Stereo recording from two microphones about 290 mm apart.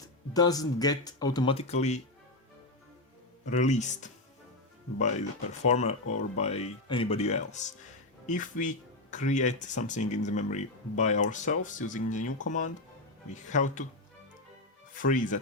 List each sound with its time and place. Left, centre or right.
0.3 s speech: centre
3.4 s speech: left
5.6 s speech: left
5.9 s speech: left
6.3 s speech: left
13.5 s speech: left
14.9 s speech: left